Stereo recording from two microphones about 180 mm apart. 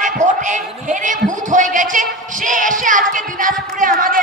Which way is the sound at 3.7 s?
50° right (ahead or behind).